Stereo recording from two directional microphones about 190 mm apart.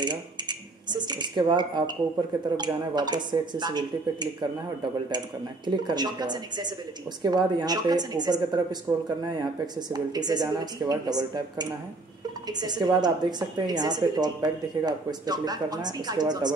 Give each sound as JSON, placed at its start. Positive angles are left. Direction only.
{"t": 0.0, "sound": "a woman's voice", "side_deg": -25}
{"t": 5.7, "sound": "a woman's voice", "side_deg": -20}